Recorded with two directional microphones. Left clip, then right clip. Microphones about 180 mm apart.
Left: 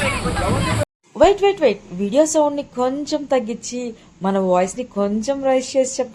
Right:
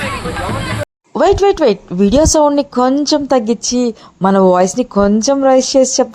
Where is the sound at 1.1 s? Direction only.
55° right (ahead or behind).